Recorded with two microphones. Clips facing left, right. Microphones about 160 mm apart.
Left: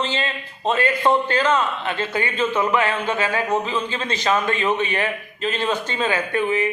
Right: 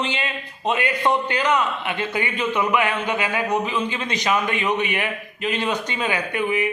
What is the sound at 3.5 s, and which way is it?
Speech, 30° left (ahead or behind).